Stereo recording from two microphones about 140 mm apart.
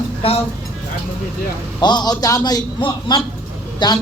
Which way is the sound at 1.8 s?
30° left (ahead or behind).